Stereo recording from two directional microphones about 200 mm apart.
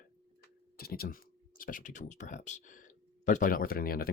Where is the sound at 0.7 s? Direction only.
50° left (ahead or behind).